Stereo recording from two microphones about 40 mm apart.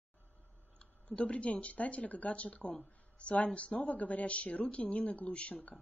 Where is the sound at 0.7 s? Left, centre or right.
Left.